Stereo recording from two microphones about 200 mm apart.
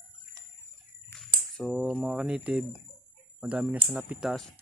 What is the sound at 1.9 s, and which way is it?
Speech, 5° right (ahead or behind).